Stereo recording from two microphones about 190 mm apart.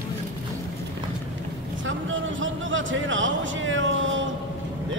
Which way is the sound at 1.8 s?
80° right.